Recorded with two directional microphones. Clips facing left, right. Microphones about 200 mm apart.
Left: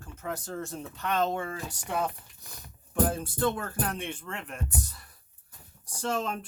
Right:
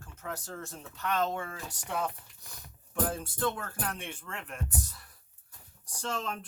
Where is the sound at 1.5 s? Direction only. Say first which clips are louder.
Left 4 dB; 5° left (ahead or behind).